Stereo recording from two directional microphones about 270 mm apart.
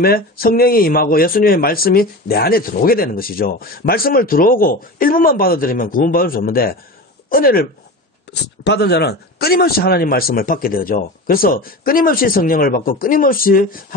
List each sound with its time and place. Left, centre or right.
0.0 s speech: left